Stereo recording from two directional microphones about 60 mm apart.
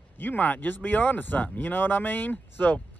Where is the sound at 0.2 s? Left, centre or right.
Left.